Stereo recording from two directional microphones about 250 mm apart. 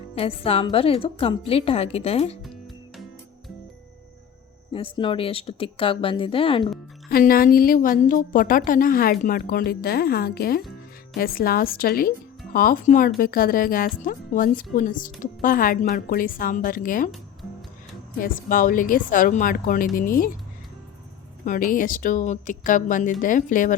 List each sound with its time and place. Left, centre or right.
0.2 s a woman's voice: left
4.7 s a woman's voice: left
7.1 s speech: left
18.2 s speech: left
21.4 s speech: left